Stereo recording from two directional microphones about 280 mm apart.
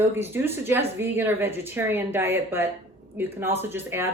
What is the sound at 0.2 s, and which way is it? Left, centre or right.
Speech, centre.